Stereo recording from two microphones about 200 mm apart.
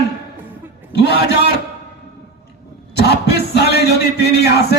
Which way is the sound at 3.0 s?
55° left (ahead or behind).